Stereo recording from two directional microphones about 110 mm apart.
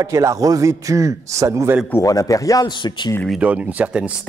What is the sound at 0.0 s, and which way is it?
A man's voice, 30° right (ahead or behind).